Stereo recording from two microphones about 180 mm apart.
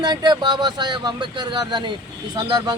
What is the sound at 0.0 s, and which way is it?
Speech, 25° right (ahead or behind).